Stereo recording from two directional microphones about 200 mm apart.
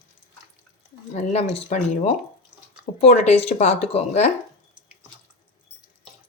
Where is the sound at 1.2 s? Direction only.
35° left (ahead or behind).